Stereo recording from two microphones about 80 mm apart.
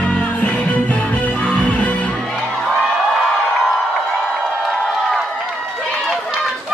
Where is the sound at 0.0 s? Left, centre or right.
Centre.